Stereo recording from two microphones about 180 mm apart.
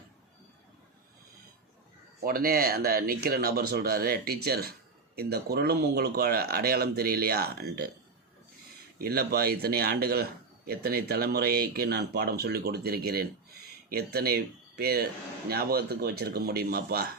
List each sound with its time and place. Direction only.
2.2 s speech: 55° right (ahead or behind)
9.0 s speech: 60° right (ahead or behind)